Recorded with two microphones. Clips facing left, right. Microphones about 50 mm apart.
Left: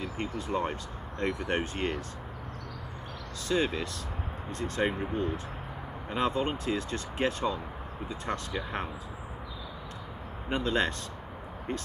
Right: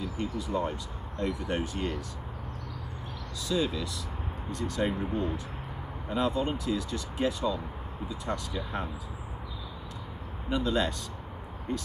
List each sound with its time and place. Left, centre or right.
0.0 s speech: left
3.4 s speech: left
10.5 s speech: left